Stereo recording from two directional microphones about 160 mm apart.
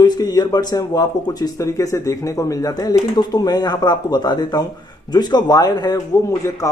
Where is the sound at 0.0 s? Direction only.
25° left (ahead or behind).